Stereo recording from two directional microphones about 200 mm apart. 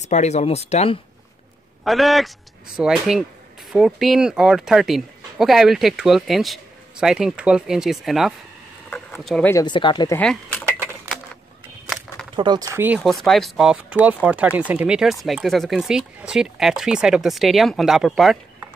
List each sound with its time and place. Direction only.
0.0 s speech: 35° left (ahead or behind)
1.9 s speech: centre (ahead or behind)
8.9 s a sound: centre (ahead or behind)
9.5 s speech: 20° left (ahead or behind)
10.1 s speech: 5° left (ahead or behind)
12.4 s speech: 20° right (ahead or behind)
12.7 s speech: 10° right (ahead or behind)
13.0 s speech: centre (ahead or behind)